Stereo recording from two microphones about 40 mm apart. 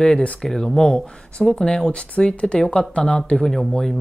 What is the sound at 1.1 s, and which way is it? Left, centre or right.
Speech, left.